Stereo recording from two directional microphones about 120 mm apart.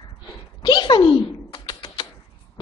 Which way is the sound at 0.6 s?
40° left (ahead or behind).